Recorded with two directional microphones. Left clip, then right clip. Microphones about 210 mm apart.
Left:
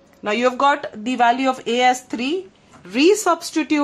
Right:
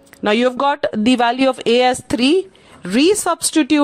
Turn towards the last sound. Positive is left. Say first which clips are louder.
# right 3 dB
turn(degrees=-35)  # may be behind; listen again after turning